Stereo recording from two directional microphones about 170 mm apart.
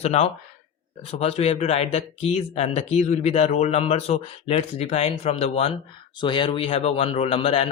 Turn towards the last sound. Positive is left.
turn(degrees=35)  # may be behind; listen again after turning